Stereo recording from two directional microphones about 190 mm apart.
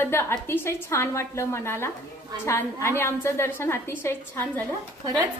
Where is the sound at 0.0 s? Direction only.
15° left (ahead or behind).